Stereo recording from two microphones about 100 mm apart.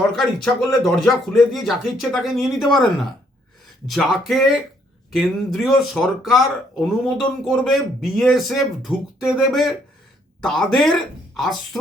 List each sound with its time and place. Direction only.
0.2 s speech: 5° left (ahead or behind)
3.8 s speech: centre (ahead or behind)